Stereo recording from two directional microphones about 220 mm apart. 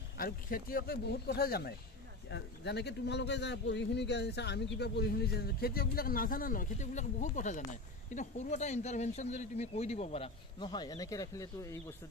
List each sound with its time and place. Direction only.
0.2 s a man's voice: 40° left (ahead or behind); by 11.8 s 15° left (ahead or behind)